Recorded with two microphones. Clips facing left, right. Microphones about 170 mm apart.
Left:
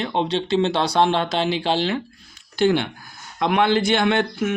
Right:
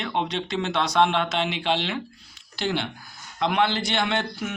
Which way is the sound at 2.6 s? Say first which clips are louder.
Left 9 dB; 50° left (ahead or behind).